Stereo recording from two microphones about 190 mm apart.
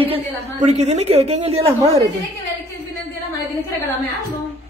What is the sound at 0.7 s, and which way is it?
A woman's voice, 35° right (ahead or behind).